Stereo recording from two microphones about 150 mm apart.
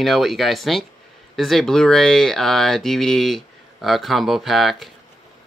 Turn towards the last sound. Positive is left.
turn(degrees=0)  # may be behind; listen again after turning